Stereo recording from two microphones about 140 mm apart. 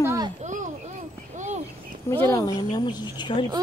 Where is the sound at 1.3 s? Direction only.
60° right (ahead or behind).